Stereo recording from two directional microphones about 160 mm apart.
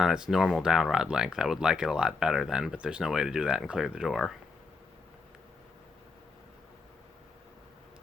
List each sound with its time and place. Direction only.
0.0 s speech: 5° right (ahead or behind)